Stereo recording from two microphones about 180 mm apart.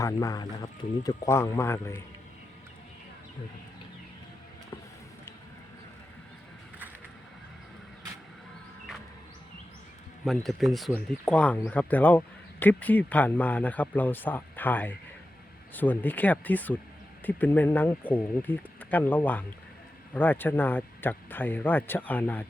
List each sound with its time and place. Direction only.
0.0 s speech: 20° left (ahead or behind)
10.2 s speech: centre (ahead or behind)